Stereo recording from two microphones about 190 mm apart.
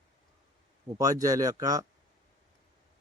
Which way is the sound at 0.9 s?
20° right (ahead or behind).